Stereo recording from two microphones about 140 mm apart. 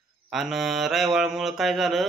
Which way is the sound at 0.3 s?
Centre (ahead or behind).